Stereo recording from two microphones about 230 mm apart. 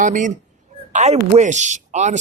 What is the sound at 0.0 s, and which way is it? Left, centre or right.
A man's voice, right.